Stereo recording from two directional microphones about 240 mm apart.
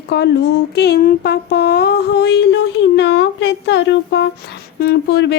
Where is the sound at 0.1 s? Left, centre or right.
Left.